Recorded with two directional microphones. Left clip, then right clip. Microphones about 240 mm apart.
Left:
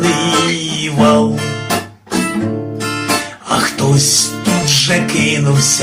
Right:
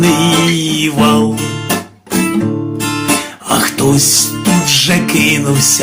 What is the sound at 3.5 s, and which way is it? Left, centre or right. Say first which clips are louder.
Music: right 2 dB; right.